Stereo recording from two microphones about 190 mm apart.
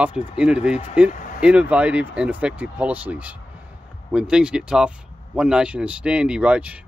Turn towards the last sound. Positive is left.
turn(degrees=-5)  # may be behind; listen again after turning